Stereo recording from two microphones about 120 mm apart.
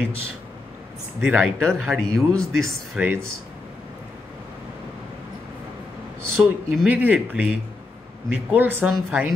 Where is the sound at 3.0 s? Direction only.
10° right (ahead or behind).